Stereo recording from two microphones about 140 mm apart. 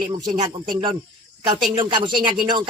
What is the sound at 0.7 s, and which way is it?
Speech, 35° right (ahead or behind).